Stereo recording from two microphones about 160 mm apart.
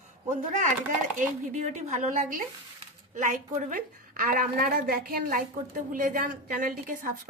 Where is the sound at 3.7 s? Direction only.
60° right (ahead or behind).